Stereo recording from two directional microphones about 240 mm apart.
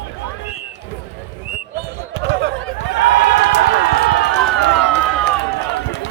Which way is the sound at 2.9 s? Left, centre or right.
Left.